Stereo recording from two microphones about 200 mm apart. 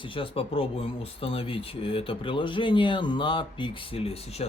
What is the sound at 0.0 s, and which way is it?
Speech, 25° left (ahead or behind).